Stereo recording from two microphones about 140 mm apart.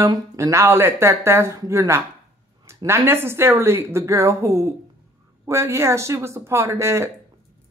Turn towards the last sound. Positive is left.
turn(degrees=-20)  # may be behind; listen again after turning